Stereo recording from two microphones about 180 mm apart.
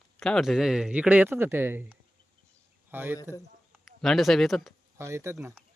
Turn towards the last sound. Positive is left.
turn(degrees=-15)  # may be behind; listen again after turning